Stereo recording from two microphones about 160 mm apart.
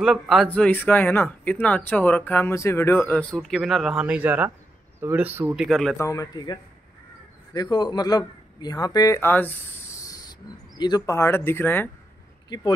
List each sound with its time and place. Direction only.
0.0 s speech: centre (ahead or behind)
0.5 s speech: 10° left (ahead or behind); by 5.7 s 15° right (ahead or behind)
5.7 s speech: 5° left (ahead or behind)
5.9 s a man's voice: 20° left (ahead or behind)
12.4 s speech: 25° left (ahead or behind)